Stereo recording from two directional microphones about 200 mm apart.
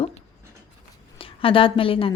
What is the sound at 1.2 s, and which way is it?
Speech, 25° left (ahead or behind).